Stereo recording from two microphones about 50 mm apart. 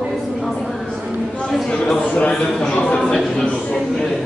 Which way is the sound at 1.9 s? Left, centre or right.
Left.